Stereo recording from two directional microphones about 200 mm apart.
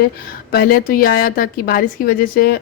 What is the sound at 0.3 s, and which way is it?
A woman's voice, 50° left (ahead or behind).